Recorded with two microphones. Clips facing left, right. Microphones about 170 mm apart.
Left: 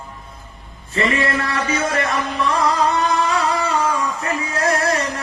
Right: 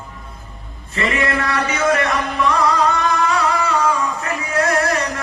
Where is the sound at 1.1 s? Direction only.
30° left (ahead or behind).